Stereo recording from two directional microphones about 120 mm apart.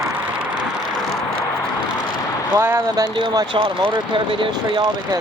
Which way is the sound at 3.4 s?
40° right (ahead or behind).